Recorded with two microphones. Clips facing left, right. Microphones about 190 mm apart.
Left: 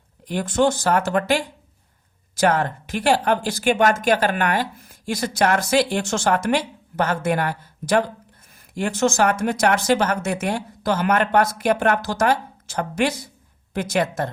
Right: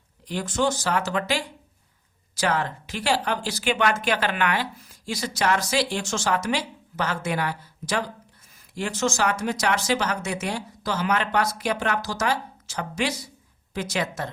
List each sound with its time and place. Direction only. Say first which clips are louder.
0.3 s a woman's voice: left 5 dB; 55° left (ahead or behind)